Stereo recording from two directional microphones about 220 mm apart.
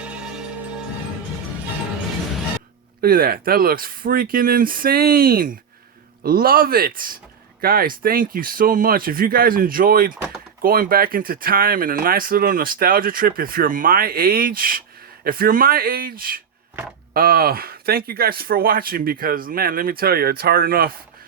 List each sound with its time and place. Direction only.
0.0 s music: 5° right (ahead or behind)
3.0 s speech: 40° right (ahead or behind)
10.2 s a sound: 5° right (ahead or behind)
10.6 s speech: 40° right (ahead or behind)